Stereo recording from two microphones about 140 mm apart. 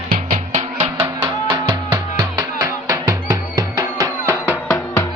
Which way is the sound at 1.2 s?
35° right (ahead or behind).